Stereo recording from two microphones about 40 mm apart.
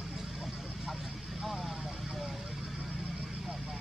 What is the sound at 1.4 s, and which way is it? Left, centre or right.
Vehicle, centre.